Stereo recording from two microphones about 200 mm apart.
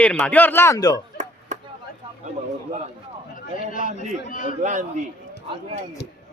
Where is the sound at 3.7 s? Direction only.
40° left (ahead or behind).